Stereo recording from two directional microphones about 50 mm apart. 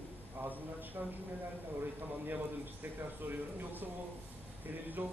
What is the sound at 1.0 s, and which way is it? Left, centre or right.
Speech, right.